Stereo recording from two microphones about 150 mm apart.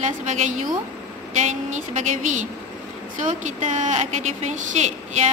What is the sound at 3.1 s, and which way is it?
A woman's voice, 60° right (ahead or behind).